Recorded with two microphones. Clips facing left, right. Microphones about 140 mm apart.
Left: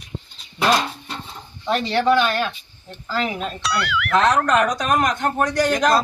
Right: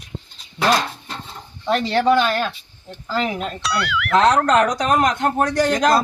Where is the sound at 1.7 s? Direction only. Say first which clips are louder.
Right 1 dB; centre (ahead or behind).